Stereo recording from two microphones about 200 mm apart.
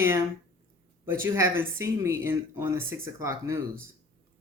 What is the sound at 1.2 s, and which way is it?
Speech, 10° right (ahead or behind).